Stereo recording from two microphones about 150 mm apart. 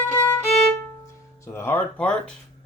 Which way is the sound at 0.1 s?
15° left (ahead or behind).